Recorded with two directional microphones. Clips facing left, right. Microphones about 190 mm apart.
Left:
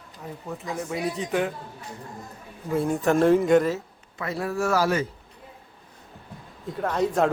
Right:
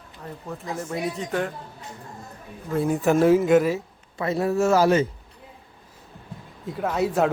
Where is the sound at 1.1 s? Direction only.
Centre (ahead or behind).